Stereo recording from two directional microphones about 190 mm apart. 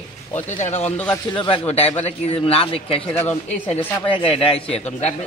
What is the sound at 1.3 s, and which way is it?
A man's voice, 25° left (ahead or behind).